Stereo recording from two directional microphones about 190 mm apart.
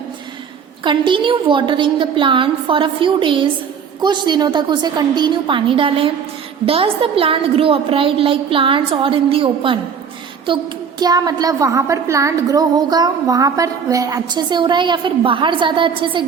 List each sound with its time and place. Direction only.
0.9 s a woman's voice: 25° right (ahead or behind)
11.0 s a woman's voice: 20° right (ahead or behind)